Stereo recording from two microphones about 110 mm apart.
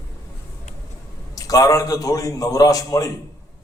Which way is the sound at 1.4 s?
30° left (ahead or behind).